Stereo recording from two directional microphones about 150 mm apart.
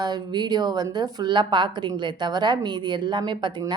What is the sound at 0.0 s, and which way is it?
A woman's voice, 25° right (ahead or behind).